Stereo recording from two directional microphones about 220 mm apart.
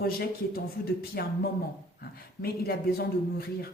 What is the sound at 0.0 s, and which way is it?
A man's voice, 45° left (ahead or behind).